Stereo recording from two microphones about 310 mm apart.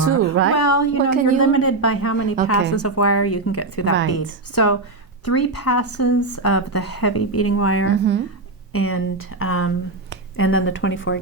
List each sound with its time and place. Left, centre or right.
0.1 s a sound: right
0.5 s a woman's voice: left
1.4 s speech: left
3.9 s speech: right
4.5 s speech: left
7.9 s speech: right
8.7 s speech: left